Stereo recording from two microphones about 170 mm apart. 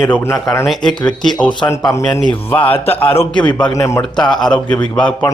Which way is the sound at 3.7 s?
20° left (ahead or behind).